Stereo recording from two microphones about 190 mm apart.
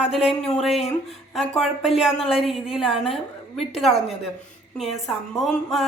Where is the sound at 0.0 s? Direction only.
Centre (ahead or behind).